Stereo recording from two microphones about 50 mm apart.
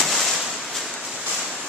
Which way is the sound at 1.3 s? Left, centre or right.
Centre.